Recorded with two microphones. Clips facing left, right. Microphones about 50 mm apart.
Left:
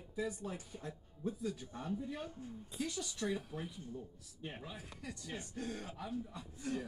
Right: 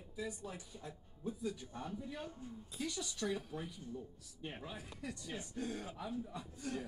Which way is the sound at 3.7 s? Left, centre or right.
Left.